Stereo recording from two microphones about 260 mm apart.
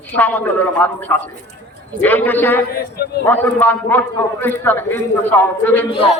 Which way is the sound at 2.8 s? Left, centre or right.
Left.